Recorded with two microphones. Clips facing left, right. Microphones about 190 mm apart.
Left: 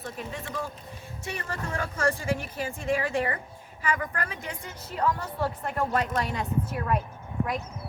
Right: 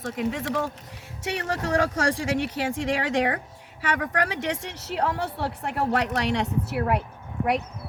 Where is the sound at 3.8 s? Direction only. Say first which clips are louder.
Right 4 dB; 80° right.